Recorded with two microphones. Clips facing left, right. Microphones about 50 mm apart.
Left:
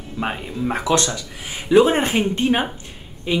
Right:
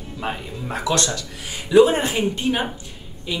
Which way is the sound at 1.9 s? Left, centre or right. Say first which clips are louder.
Left 2 dB; left.